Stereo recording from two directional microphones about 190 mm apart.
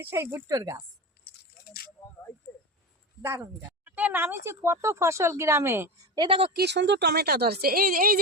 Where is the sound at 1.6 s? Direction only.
55° left (ahead or behind).